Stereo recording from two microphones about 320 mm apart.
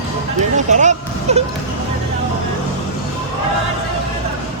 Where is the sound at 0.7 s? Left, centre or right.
Right.